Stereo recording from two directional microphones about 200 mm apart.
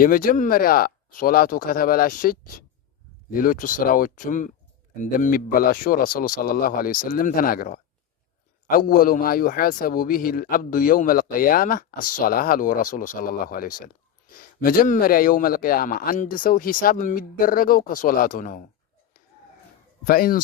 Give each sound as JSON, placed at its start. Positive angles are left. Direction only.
{"t": 0.0, "sound": "a man's voice", "side_deg": 45}
{"t": 20.1, "sound": "a man's voice", "side_deg": 45}